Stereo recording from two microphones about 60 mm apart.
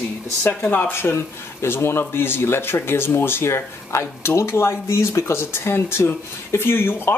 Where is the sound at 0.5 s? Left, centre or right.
Left.